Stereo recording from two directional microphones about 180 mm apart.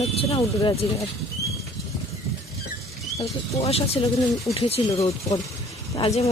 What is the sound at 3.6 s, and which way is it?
Speech, 35° left (ahead or behind).